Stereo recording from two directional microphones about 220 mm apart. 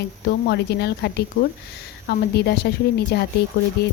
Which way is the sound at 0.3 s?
50° left (ahead or behind).